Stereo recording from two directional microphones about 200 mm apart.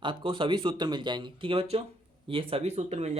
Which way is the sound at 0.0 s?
25° right (ahead or behind).